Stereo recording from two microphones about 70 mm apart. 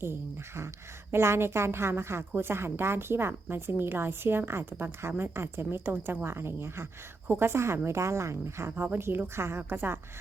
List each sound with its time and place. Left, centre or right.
0.0 s a woman's voice: right
8.7 s a woman's voice: right